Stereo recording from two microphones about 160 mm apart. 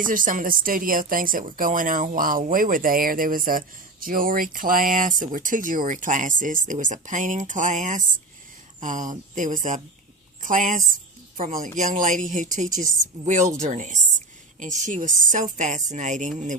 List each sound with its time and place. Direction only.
0.1 s speech: 60° right (ahead or behind)